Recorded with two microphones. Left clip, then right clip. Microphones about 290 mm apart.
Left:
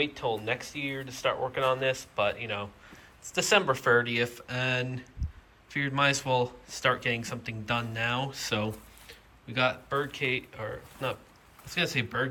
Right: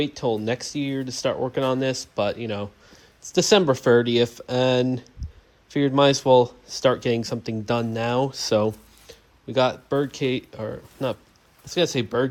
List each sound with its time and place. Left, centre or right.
0.0 s speech: right